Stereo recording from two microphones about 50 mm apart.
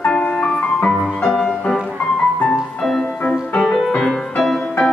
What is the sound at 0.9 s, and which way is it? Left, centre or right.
Music, centre.